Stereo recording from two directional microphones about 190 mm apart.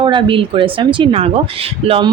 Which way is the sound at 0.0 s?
25° right (ahead or behind).